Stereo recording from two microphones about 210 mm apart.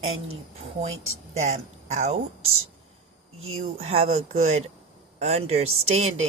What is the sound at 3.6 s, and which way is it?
A woman's voice, 30° right (ahead or behind).